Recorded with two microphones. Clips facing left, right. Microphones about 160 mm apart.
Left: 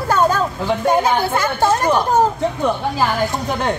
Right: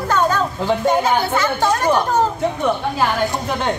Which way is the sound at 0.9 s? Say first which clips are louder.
Left 2 dB; 10° left (ahead or behind).